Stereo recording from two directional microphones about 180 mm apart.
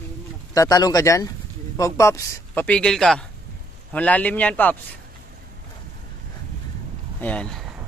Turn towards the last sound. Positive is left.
turn(degrees=0)  # may be behind; listen again after turning